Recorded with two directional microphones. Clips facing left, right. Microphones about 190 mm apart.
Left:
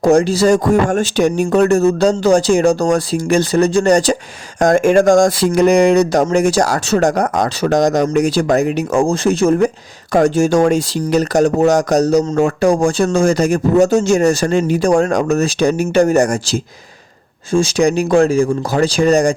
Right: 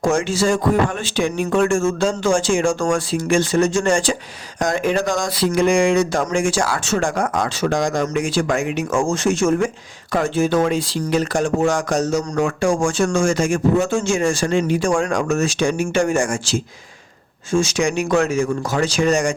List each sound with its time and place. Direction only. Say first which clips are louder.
0.0 s speech: left 7 dB; 35° left (ahead or behind)